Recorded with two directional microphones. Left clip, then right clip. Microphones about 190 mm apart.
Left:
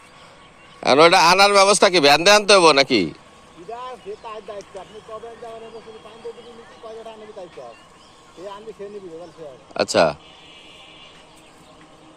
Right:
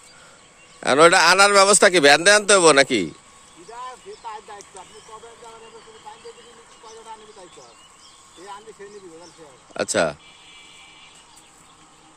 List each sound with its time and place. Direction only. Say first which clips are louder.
0.8 s a man's voice: left 1 dB; 35° right (ahead or behind)
9.7 s a man's voice: left 4 dB; 35° right (ahead or behind)